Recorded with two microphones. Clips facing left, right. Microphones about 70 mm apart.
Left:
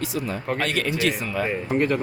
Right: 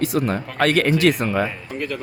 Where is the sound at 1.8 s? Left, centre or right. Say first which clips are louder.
Left 6 dB; left.